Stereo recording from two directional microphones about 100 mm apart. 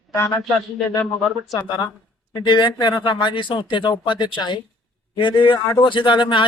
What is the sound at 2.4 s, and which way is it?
Speech, 50° left (ahead or behind).